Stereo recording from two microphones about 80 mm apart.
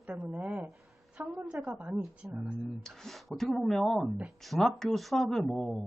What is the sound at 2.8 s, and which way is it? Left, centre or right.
Speech, centre.